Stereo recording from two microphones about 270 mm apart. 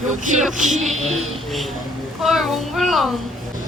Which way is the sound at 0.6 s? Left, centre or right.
Centre.